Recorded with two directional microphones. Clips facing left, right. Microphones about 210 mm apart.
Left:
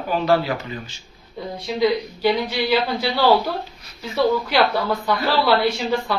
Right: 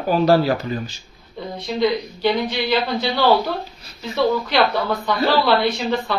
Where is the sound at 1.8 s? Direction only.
10° left (ahead or behind).